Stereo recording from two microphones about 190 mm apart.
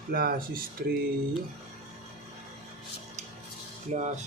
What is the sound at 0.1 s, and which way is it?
Speech, 50° right (ahead or behind).